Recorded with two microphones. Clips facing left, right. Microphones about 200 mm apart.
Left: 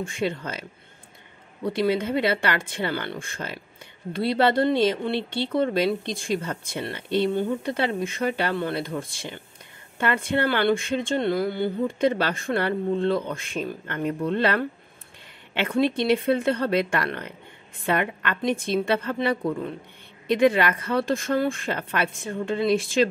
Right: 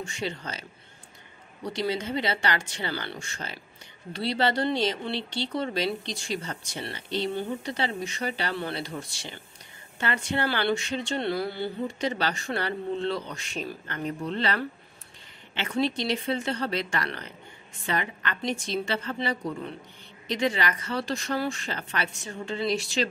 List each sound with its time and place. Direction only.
0.0 s a woman's voice: 55° left (ahead or behind)